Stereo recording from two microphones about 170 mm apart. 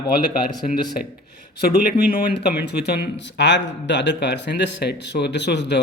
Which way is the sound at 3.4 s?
90° left.